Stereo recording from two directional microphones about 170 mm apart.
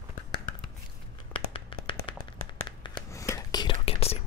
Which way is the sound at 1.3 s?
30° left (ahead or behind).